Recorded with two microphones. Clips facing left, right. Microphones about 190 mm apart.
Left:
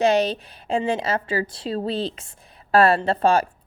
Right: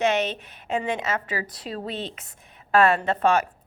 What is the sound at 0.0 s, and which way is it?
A woman's voice, 35° left (ahead or behind).